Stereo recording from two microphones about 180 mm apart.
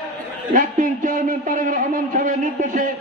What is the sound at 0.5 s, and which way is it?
A man's voice, 45° right (ahead or behind).